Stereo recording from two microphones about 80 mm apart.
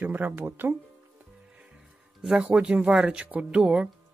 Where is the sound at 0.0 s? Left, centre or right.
Right.